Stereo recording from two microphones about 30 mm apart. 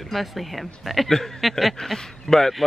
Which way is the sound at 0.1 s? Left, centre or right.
Centre.